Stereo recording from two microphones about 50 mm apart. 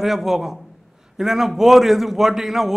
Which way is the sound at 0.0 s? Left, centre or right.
Centre.